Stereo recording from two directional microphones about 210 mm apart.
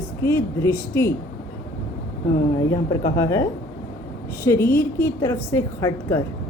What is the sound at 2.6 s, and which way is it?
Speech, 15° left (ahead or behind).